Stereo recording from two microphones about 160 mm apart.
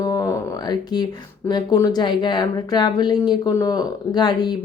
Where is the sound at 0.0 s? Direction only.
20° left (ahead or behind).